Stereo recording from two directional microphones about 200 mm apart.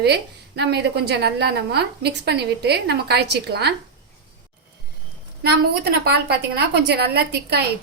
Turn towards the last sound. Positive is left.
turn(degrees=-55)  # may be behind; listen again after turning